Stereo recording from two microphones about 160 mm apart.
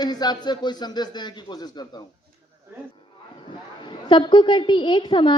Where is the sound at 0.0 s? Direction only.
25° left (ahead or behind).